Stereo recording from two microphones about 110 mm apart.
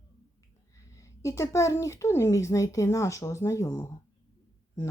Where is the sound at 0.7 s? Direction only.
30° left (ahead or behind).